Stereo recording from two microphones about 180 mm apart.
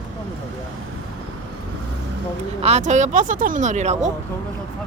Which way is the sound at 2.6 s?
40° right (ahead or behind).